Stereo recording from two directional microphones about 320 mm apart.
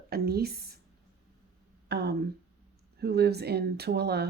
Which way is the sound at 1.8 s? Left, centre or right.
Right.